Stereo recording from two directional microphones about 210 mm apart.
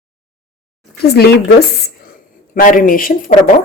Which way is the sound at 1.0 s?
50° left (ahead or behind).